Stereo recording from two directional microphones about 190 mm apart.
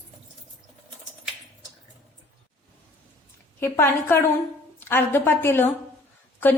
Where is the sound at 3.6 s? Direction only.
15° left (ahead or behind).